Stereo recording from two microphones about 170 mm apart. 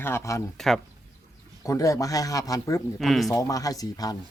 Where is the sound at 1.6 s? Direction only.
20° left (ahead or behind).